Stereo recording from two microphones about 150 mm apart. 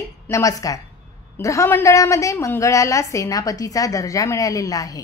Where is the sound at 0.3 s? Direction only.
20° left (ahead or behind).